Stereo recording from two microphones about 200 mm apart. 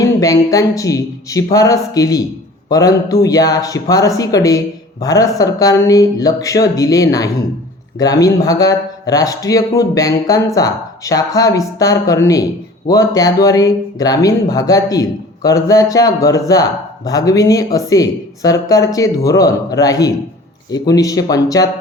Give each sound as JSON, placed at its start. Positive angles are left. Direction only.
{"t": 0.0, "sound": "speech", "side_deg": 15}